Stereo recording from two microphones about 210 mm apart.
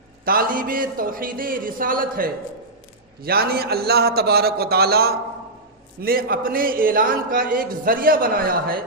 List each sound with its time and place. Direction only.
0.3 s a man's voice: 45° right (ahead or behind)